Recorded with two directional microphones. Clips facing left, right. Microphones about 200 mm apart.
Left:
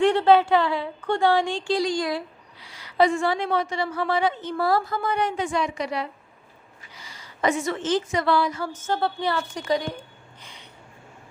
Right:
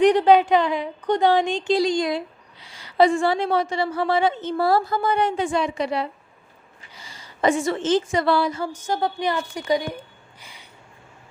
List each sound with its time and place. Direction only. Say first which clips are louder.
0.0 s a woman's voice: right 2 dB; 15° right (ahead or behind)
8.6 s a woman's voice: right 1 dB; 15° right (ahead or behind)
10.4 s a sound: even; 10° right (ahead or behind)